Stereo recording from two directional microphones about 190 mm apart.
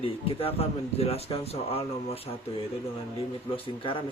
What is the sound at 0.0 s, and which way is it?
Speech, 30° left (ahead or behind).